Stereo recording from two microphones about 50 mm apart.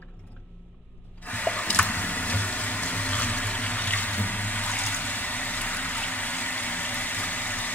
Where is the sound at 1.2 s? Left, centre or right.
Left.